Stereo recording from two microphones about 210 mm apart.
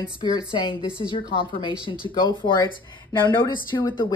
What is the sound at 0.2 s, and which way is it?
A woman's voice, 20° left (ahead or behind).